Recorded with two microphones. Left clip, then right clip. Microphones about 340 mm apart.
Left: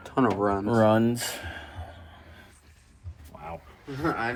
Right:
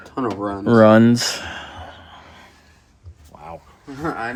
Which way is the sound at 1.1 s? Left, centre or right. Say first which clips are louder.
Right 11 dB; right.